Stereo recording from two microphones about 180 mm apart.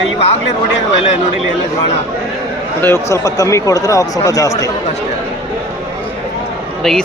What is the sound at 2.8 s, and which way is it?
Speech, 15° left (ahead or behind).